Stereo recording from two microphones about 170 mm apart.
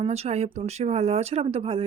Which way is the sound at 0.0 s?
40° right (ahead or behind).